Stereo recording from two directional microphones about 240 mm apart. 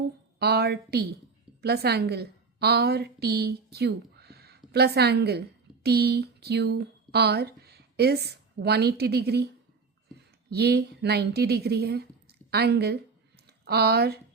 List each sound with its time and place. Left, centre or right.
0.3 s a woman's voice: right
10.5 s a woman's voice: right